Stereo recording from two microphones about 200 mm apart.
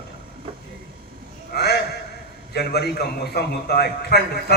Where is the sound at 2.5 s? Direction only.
55° left (ahead or behind).